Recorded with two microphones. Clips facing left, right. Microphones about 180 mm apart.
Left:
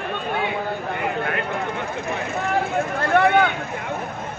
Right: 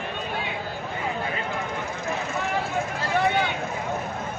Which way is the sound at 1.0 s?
65° left (ahead or behind).